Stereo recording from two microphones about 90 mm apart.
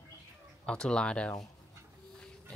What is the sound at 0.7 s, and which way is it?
Speech, 10° left (ahead or behind).